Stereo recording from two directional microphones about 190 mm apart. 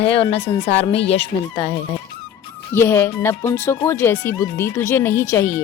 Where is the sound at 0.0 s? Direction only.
30° left (ahead or behind).